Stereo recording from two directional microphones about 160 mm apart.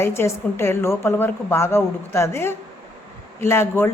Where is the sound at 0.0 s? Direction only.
15° left (ahead or behind).